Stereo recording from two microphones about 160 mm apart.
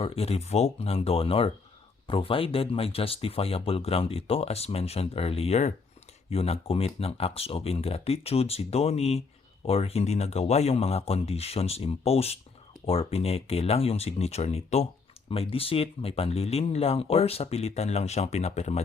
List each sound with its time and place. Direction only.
0.0 s speech: 40° left (ahead or behind)